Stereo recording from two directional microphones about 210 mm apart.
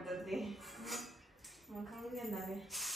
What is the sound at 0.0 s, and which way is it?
Music, centre (ahead or behind).